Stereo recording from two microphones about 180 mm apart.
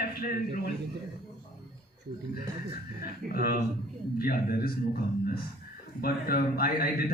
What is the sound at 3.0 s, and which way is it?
A man's voice, 55° left (ahead or behind).